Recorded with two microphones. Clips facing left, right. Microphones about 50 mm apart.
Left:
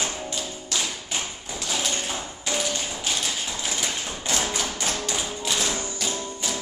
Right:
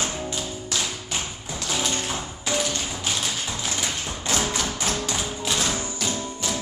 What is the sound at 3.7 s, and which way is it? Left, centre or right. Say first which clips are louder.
Tap: right 1 dB; centre.